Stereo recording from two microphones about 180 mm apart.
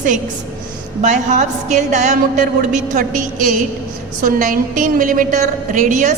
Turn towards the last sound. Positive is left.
turn(degrees=-45)  # may be behind; listen again after turning